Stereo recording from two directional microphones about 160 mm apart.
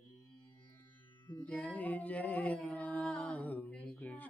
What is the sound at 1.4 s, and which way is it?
Music, 10° left (ahead or behind).